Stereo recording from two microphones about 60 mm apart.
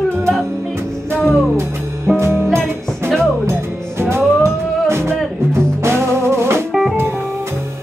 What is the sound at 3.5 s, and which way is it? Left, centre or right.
Music, right.